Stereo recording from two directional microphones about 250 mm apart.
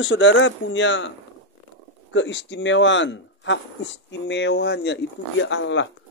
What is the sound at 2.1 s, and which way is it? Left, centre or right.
Speech, left.